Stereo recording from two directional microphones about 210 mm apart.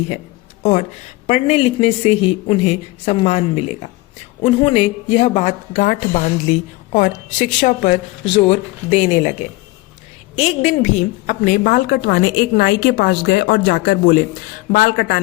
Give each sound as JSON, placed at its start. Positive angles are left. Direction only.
{"t": 0.6, "sound": "a man's voice", "side_deg": 30}
{"t": 10.3, "sound": "a woman's voice", "side_deg": 30}